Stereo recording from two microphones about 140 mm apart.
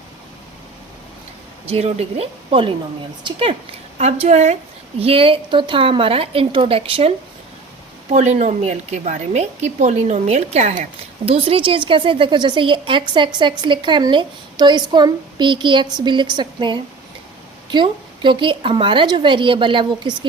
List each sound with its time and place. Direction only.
1.6 s a woman's voice: 45° right (ahead or behind)
3.9 s a woman's voice: 50° right (ahead or behind)
8.1 s a woman's voice: 55° right (ahead or behind); by 20.1 s 35° right (ahead or behind)